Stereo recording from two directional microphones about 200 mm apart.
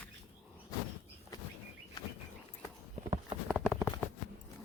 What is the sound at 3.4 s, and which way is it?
Clip-clop, 5° left (ahead or behind).